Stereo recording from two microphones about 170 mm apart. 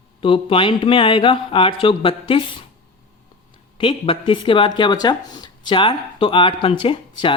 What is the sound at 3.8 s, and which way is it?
Speech, 30° left (ahead or behind).